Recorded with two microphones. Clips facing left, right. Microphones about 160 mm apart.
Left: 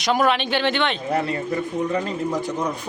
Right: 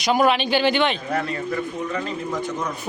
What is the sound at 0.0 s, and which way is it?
Speech, centre (ahead or behind).